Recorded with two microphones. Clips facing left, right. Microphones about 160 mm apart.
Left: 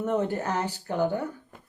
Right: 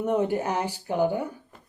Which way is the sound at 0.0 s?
10° right (ahead or behind).